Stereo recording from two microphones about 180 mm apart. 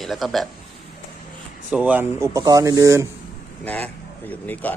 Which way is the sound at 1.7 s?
10° right (ahead or behind).